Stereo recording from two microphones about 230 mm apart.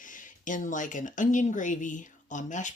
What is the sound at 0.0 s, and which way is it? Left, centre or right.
Speech, left.